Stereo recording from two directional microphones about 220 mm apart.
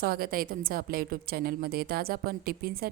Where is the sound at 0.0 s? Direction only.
45° right (ahead or behind).